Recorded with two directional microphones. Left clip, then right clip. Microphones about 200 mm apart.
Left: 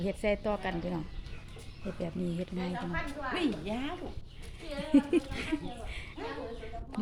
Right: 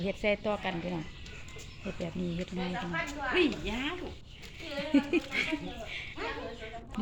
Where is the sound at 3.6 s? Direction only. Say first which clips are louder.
Right 2 dB; 65° left (ahead or behind).